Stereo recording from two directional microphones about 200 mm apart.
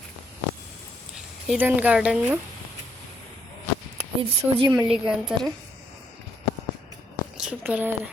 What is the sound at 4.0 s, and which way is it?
Speech, 30° right (ahead or behind).